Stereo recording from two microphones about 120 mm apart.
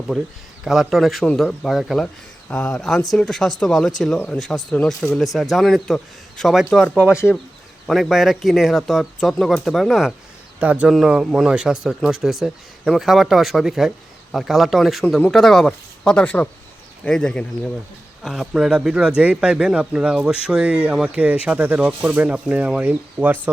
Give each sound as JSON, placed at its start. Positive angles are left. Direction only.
{"t": 0.1, "sound": "speech", "side_deg": 0}
{"t": 7.1, "sound": "speech", "side_deg": 25}
{"t": 7.9, "sound": "speech", "side_deg": 0}
{"t": 10.6, "sound": "speech", "side_deg": -10}
{"t": 18.2, "sound": "speech", "side_deg": -5}